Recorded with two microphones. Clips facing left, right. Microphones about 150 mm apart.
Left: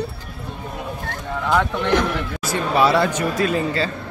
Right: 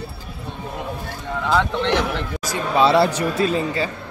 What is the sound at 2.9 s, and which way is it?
Speech, 35° right (ahead or behind).